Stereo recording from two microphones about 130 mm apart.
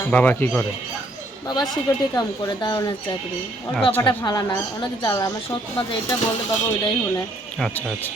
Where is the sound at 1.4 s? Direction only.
30° left (ahead or behind).